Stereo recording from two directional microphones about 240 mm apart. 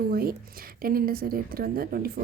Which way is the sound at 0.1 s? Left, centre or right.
Right.